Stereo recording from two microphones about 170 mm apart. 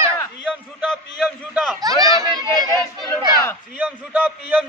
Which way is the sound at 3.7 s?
10° right (ahead or behind).